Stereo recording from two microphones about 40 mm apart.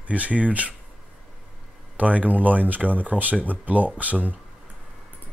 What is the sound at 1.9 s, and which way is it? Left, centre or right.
Speech, right.